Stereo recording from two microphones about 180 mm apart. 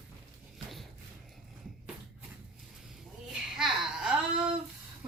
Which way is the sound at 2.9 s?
Centre (ahead or behind).